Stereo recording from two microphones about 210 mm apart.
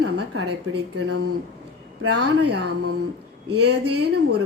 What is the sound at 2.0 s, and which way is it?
Speech, 90° right.